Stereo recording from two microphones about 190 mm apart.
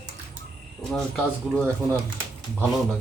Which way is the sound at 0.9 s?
Centre (ahead or behind).